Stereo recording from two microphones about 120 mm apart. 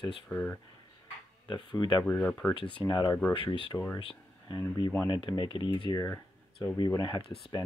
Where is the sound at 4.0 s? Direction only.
45° left (ahead or behind).